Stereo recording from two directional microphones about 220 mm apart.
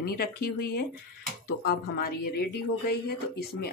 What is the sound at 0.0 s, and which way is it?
Speech, 45° left (ahead or behind).